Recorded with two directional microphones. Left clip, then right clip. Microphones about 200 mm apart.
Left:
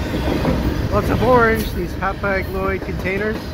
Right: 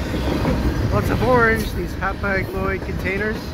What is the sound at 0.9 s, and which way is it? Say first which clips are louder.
Vehicle: left 3 dB; 10° left (ahead or behind).